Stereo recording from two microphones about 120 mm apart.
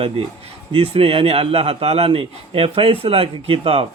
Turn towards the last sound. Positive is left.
turn(degrees=-50)  # may be behind; listen again after turning